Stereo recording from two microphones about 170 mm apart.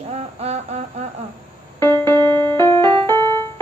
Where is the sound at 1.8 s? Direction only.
15° left (ahead or behind).